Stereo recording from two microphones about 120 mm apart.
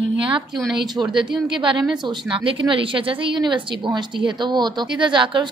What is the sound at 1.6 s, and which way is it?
A woman's voice, 40° right (ahead or behind).